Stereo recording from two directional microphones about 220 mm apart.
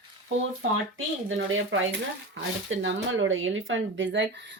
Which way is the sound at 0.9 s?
60° right (ahead or behind).